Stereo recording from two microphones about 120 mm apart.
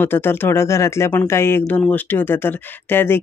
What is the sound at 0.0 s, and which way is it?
Speech, 20° left (ahead or behind).